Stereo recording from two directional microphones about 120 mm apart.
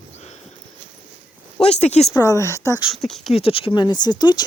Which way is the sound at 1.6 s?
65° left (ahead or behind).